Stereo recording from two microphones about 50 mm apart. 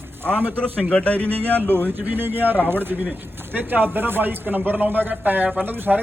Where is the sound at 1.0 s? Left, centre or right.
Left.